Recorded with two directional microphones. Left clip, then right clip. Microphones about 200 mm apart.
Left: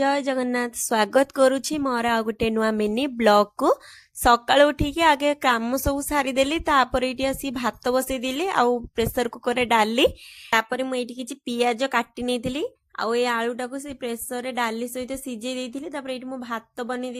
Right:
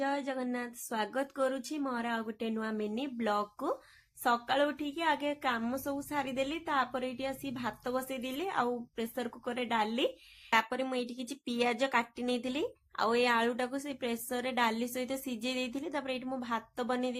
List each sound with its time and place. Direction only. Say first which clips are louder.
0.0 s a woman's voice: left 12 dB; 55° left (ahead or behind)
10.5 s a woman's voice: left 8 dB; 35° left (ahead or behind)